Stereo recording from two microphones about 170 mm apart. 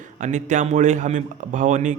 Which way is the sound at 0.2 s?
45° right (ahead or behind).